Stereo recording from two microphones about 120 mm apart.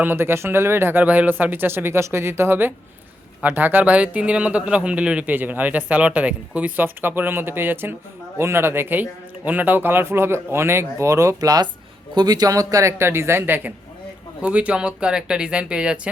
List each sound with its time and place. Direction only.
0.0 s a man's voice: 15° right (ahead or behind)